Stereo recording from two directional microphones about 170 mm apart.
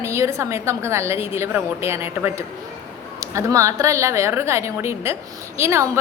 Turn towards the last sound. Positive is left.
turn(degrees=-15)  # may be behind; listen again after turning